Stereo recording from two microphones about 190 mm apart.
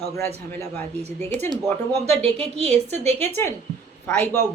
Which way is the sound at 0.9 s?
35° right (ahead or behind).